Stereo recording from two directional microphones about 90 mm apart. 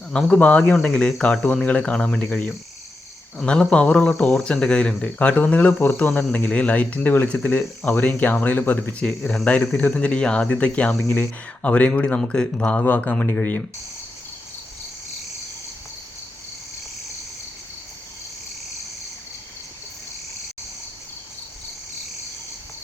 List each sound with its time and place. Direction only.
0.1 s speech: 10° left (ahead or behind)